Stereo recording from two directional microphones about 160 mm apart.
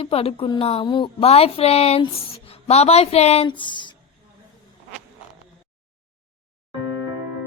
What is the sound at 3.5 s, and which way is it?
Speech, 30° left (ahead or behind).